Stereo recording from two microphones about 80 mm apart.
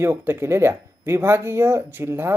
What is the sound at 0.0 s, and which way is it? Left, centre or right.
Speech, right.